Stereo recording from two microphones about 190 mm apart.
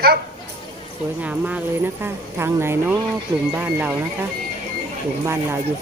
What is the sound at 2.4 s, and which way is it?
A woman's voice, 10° right (ahead or behind).